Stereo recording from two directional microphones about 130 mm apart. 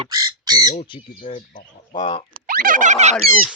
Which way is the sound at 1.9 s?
35° left (ahead or behind).